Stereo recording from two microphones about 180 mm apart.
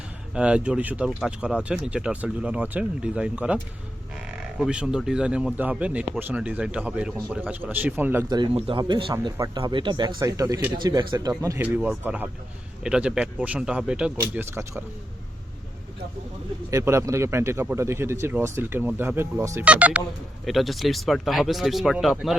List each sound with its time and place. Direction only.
0.3 s speech: 5° right (ahead or behind)
8.3 s speech: 30° right (ahead or behind)
16.7 s speech: 15° right (ahead or behind)